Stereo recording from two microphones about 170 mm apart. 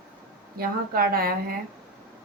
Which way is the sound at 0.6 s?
60° right (ahead or behind).